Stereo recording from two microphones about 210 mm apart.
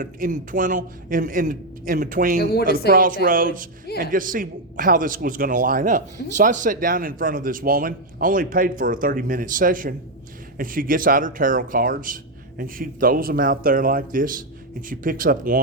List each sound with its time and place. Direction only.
0.0 s a man's voice: 40° right (ahead or behind)
2.4 s speech: 50° left (ahead or behind)
2.9 s a man's voice: 40° right (ahead or behind)